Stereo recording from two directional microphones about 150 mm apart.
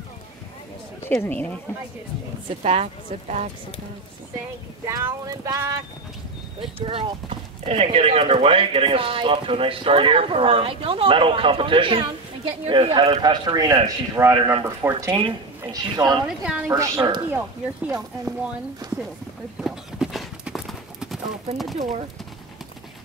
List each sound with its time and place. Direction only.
1.0 s a woman's voice: 15° left (ahead or behind)
2.6 s speech: 45° right (ahead or behind)
4.8 s a sound: 20° right (ahead or behind)
6.8 s speech: 35° right (ahead or behind); by 15.2 s 20° right (ahead or behind)
15.6 s a sound: 25° right (ahead or behind)
16.3 s a woman's voice: 5° right (ahead or behind)
16.7 s a sound: 20° right (ahead or behind)
18.8 s speech: 30° right (ahead or behind)
19.6 s clip-clop: 5° right (ahead or behind)
21.7 s speech: 50° right (ahead or behind)